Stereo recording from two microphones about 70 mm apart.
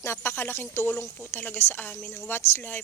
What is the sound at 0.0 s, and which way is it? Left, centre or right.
Speech, left.